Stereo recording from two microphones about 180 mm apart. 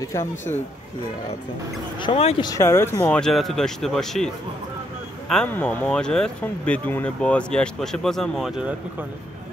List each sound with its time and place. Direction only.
2.0 s speech: 30° left (ahead or behind)
2.5 s speech: 15° left (ahead or behind)
5.3 s speech: 5° left (ahead or behind)